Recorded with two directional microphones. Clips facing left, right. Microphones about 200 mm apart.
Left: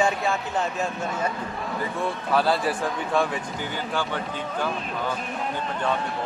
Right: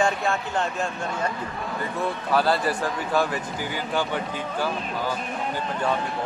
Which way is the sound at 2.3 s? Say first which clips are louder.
Even; centre (ahead or behind).